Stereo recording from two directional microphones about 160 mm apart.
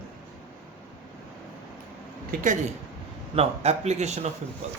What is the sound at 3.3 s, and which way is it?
Speech, 40° right (ahead or behind).